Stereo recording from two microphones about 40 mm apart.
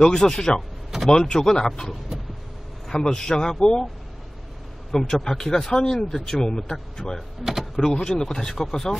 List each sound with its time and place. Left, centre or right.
0.0 s speech: centre
2.9 s speech: centre
4.9 s speech: centre